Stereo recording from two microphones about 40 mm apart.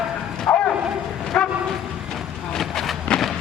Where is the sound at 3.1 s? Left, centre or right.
Left.